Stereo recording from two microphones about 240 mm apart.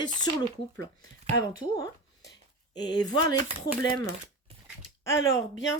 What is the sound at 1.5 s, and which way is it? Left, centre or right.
Speech, centre.